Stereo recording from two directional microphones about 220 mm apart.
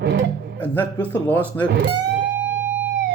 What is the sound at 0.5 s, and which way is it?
Speech, 10° left (ahead or behind).